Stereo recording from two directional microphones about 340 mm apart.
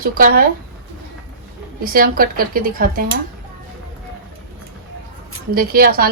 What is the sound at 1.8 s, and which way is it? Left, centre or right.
Speech, right.